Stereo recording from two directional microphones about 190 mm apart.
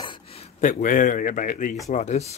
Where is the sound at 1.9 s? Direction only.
35° left (ahead or behind).